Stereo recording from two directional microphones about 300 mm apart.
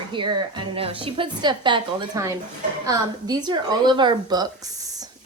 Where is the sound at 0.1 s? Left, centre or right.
Centre.